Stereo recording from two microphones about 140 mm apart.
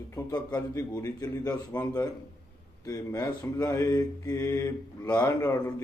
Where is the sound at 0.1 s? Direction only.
25° left (ahead or behind).